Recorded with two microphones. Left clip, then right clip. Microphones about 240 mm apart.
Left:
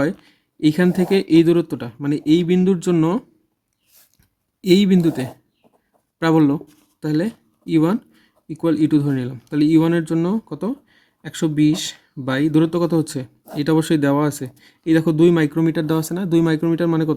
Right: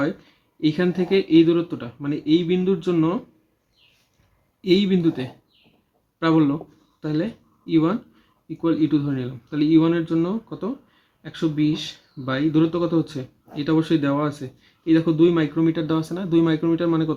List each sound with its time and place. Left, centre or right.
0.0 s speech: left
4.6 s speech: left